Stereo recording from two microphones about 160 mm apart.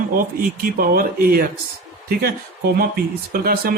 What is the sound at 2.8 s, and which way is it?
Speech, 65° right (ahead or behind).